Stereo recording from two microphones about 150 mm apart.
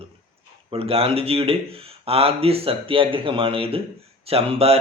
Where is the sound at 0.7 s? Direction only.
40° right (ahead or behind).